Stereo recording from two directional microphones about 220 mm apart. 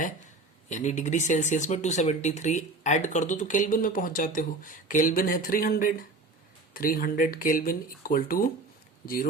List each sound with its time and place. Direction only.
0.7 s speech: 35° left (ahead or behind)